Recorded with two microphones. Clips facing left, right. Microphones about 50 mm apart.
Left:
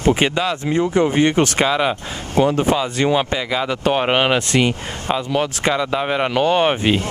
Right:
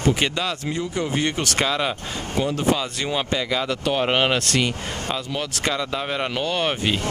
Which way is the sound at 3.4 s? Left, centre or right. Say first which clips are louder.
Left 3 dB; centre.